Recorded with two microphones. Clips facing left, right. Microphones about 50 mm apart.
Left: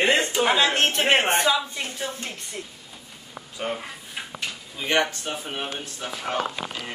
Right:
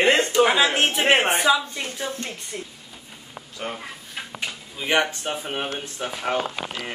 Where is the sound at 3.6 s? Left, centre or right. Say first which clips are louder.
Left 2 dB; centre.